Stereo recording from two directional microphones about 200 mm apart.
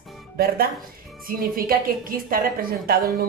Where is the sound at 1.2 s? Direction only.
45° right (ahead or behind).